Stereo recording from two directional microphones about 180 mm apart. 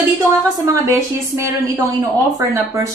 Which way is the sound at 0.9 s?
15° right (ahead or behind).